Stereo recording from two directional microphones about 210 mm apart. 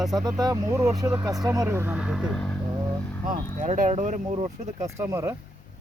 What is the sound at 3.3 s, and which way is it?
Speech, 40° right (ahead or behind).